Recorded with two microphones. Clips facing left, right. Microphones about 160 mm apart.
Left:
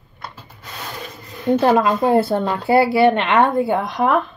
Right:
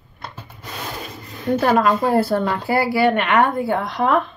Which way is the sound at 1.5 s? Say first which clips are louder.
Left 1 dB; 20° left (ahead or behind).